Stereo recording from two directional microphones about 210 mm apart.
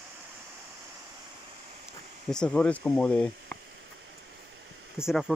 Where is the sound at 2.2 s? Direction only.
5° left (ahead or behind).